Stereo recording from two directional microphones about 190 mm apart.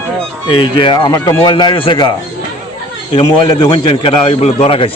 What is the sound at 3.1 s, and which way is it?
A man's voice, 25° left (ahead or behind).